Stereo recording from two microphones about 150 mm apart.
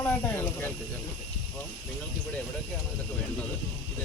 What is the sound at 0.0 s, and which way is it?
Snake, 15° left (ahead or behind).